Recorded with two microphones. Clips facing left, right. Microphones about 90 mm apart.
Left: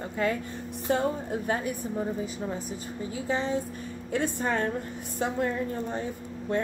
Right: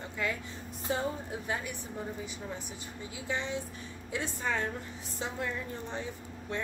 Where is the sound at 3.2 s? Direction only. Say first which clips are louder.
Left 6 dB; 35° left (ahead or behind).